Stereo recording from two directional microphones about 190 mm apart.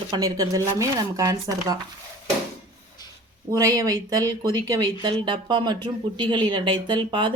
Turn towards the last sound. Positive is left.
turn(degrees=-25)  # may be behind; listen again after turning